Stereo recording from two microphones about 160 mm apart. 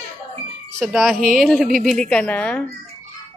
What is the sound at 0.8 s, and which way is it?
A woman's voice, centre (ahead or behind).